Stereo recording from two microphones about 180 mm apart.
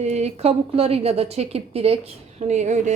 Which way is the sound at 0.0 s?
40° right (ahead or behind).